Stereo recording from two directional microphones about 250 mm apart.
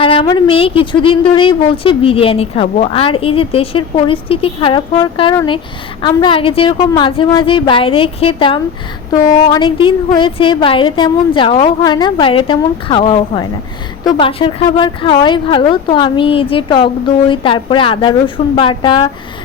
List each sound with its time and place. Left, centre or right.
0.0 s speech: left